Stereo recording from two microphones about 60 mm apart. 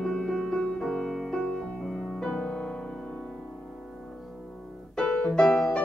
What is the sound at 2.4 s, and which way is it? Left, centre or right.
Music, centre.